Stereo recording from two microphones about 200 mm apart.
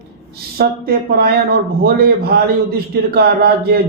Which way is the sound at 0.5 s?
50° right (ahead or behind).